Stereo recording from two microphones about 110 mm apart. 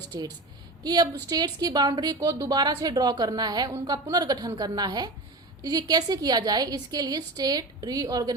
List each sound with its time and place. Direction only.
0.1 s a woman's voice: 35° right (ahead or behind)